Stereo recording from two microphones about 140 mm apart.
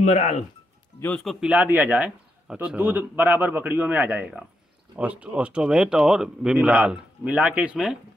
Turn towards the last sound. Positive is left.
turn(degrees=-5)  # may be behind; listen again after turning